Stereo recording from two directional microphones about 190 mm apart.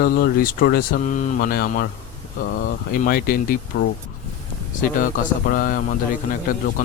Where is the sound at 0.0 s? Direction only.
50° left (ahead or behind).